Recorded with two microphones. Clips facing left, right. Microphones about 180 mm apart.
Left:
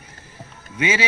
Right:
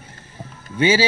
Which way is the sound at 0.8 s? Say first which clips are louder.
Right 5 dB; 30° right (ahead or behind).